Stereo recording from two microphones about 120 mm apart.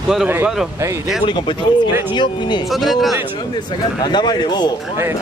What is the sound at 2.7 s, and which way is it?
Speech, centre (ahead or behind).